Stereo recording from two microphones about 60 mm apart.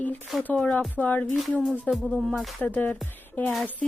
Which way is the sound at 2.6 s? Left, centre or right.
Centre.